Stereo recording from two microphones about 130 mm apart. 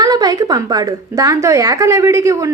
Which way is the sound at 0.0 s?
30° right (ahead or behind).